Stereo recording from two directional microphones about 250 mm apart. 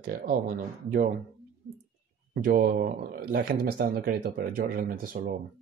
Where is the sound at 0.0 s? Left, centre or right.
Right.